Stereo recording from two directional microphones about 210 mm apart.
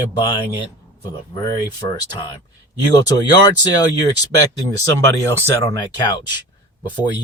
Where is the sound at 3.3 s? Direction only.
20° left (ahead or behind).